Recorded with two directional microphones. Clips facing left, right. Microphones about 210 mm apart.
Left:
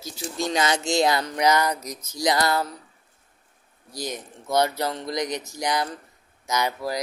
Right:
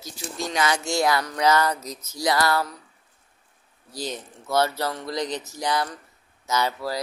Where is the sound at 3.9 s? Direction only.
15° left (ahead or behind).